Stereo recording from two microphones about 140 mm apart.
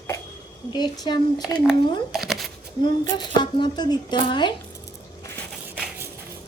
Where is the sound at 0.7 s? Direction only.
30° left (ahead or behind).